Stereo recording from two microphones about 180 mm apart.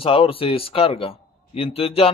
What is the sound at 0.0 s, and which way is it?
A man's voice, 30° left (ahead or behind).